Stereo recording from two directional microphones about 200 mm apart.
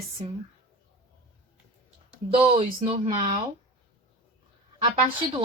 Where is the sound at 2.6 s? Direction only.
30° right (ahead or behind).